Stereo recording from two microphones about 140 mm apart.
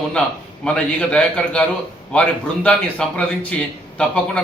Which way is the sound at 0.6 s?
10° left (ahead or behind).